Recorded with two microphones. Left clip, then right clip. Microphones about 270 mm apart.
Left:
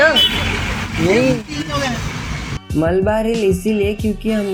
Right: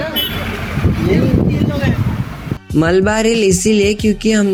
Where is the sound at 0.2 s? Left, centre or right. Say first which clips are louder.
Left 5 dB; right.